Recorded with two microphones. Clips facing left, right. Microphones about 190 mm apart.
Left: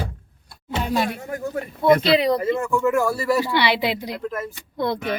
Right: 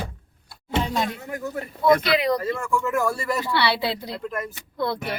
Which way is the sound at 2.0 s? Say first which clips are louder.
Left 4 dB; 30° left (ahead or behind).